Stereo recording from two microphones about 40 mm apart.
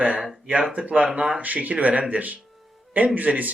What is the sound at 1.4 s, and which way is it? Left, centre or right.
A man's voice, right.